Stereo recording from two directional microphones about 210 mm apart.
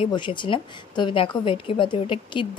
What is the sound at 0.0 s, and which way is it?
A woman's voice, 25° left (ahead or behind).